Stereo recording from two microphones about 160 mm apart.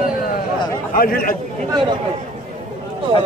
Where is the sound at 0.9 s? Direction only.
65° left (ahead or behind).